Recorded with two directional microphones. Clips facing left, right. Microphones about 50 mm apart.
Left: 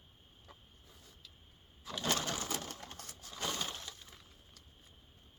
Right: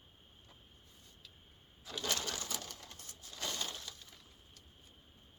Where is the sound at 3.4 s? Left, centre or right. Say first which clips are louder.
Left 2 dB; left.